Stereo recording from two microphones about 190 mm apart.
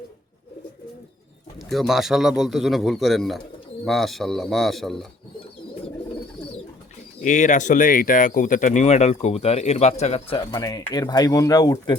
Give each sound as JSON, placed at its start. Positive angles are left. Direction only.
{"t": 1.5, "sound": "a man's voice", "side_deg": 0}
{"t": 7.2, "sound": "speech", "side_deg": 40}